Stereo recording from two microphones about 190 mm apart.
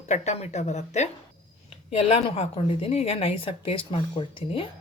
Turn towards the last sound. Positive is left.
turn(degrees=25)  # may be behind; listen again after turning